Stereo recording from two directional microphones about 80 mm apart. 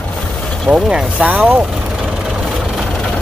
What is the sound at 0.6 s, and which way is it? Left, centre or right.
Speech, centre.